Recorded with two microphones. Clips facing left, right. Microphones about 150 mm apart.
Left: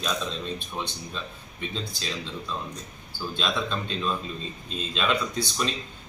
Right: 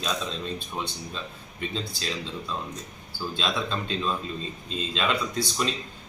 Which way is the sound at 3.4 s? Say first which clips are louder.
Left 1 dB; centre (ahead or behind).